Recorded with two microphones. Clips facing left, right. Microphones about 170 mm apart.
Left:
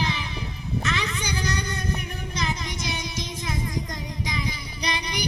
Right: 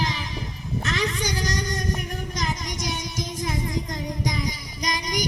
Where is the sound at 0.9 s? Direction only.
40° right (ahead or behind).